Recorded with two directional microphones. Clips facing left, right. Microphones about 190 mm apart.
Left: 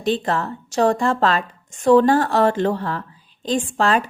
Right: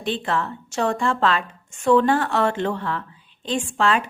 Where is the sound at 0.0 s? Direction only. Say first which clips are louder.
Left 4 dB; 40° left (ahead or behind).